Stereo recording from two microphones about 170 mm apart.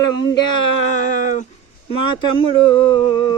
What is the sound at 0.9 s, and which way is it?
Speech, 50° left (ahead or behind).